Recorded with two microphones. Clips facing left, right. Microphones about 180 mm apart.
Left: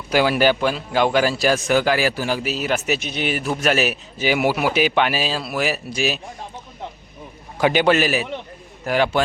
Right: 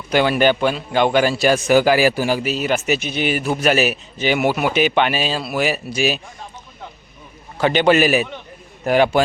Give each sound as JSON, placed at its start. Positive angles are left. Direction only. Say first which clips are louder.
{"t": 0.1, "sound": "a man's voice", "louder": "right 1 dB", "side_deg": 5}
{"t": 7.6, "sound": "a man's voice", "louder": "even", "side_deg": 10}
{"t": 7.9, "sound": "a man's voice", "louder": "right 3 dB", "side_deg": -10}
{"t": 8.8, "sound": "a man's voice", "louder": "right 4 dB", "side_deg": -20}